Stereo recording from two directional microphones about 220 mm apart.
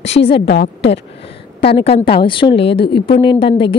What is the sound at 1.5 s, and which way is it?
A woman's voice, 25° left (ahead or behind).